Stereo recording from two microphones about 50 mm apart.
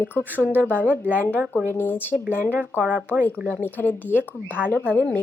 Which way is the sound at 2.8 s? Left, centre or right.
Right.